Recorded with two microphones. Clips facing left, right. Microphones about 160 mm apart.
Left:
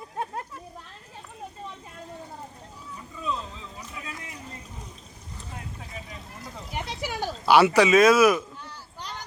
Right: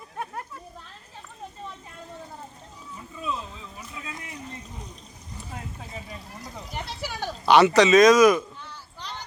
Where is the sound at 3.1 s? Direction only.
15° right (ahead or behind).